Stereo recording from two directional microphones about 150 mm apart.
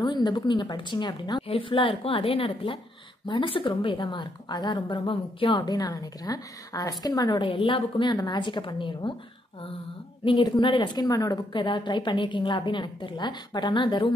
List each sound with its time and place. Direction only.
0.0 s a woman's voice: 30° left (ahead or behind)
10.2 s a woman's voice: 30° left (ahead or behind)